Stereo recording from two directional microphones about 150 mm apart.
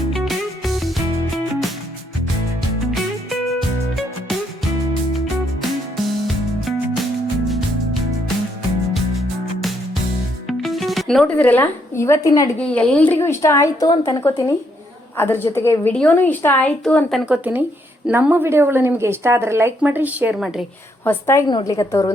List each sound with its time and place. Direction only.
0.1 s music: centre (ahead or behind)
2.9 s music: centre (ahead or behind)
6.2 s music: centre (ahead or behind)
8.9 s music: centre (ahead or behind)
10.6 s speech: centre (ahead or behind); by 12.5 s 20° left (ahead or behind)
12.5 s a woman's voice: 10° left (ahead or behind)
17.2 s a woman's voice: 10° right (ahead or behind)
21.0 s a woman's voice: 15° left (ahead or behind)